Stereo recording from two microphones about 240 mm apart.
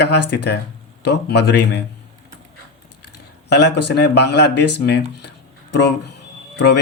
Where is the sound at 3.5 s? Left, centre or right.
Left.